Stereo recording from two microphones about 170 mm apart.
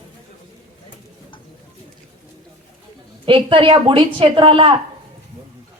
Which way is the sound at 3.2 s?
30° right (ahead or behind).